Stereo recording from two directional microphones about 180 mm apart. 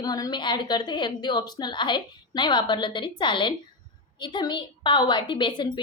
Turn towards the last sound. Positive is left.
turn(degrees=25)  # may be behind; listen again after turning